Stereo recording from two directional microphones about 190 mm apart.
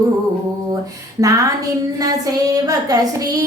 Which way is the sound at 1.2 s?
15° right (ahead or behind).